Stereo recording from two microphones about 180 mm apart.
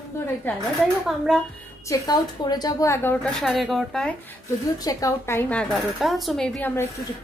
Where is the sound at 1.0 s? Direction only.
Centre (ahead or behind).